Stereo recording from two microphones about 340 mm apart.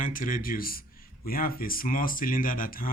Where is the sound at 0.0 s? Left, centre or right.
Left.